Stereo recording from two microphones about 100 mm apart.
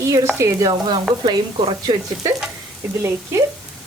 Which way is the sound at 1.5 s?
65° right (ahead or behind).